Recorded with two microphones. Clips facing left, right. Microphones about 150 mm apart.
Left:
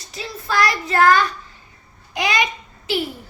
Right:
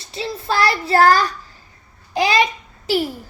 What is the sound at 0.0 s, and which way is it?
Child singing, 30° right (ahead or behind).